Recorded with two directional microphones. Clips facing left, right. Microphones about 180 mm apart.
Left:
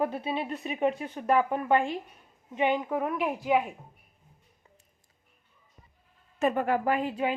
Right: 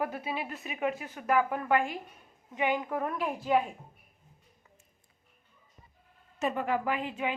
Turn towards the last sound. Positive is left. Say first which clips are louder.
# left 4 dB
turn(degrees=40)  # may be behind; listen again after turning